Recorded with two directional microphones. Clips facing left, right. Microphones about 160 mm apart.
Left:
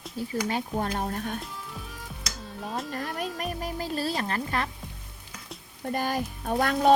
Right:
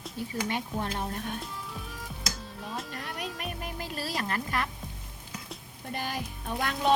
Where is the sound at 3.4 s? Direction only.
35° left (ahead or behind).